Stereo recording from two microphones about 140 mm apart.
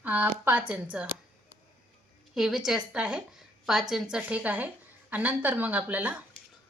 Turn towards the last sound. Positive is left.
turn(degrees=-10)  # may be behind; listen again after turning